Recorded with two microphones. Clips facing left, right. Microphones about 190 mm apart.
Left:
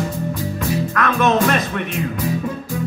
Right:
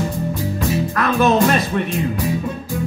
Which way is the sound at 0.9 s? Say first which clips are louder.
Right 1 dB; 30° right (ahead or behind).